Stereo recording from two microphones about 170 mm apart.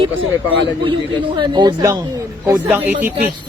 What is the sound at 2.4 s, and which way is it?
Speech, 10° right (ahead or behind).